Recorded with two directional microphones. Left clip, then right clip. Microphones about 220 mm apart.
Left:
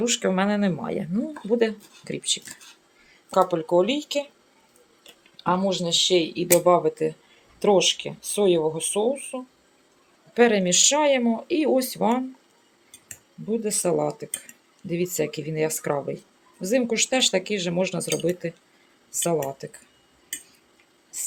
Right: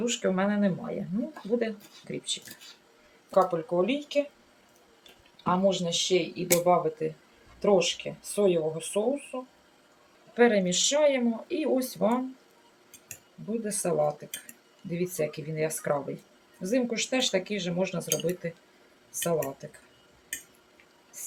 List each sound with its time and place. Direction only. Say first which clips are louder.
0.0 s speech: left 4 dB; 45° left (ahead or behind)
5.4 s speech: left 2 dB; 45° left (ahead or behind)
13.8 s speech: left 1 dB; 40° left (ahead or behind)
19.6 s speech: left 6 dB; 45° left (ahead or behind)